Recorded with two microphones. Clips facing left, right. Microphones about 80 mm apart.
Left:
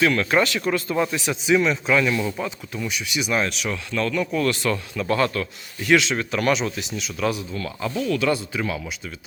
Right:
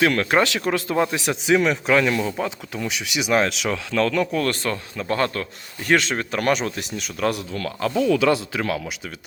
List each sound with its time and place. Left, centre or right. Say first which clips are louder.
0.0 s speech: right 1 dB; right
0.4 s speech: right 1 dB; right
2.4 s speech: right 2 dB; right
4.3 s speech: left 1 dB; right
8.2 s speech: right 3 dB; right